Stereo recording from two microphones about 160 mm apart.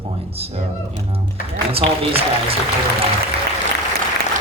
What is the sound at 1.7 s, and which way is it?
Speech, 35° right (ahead or behind).